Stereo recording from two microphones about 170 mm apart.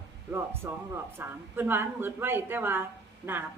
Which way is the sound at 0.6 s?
15° right (ahead or behind).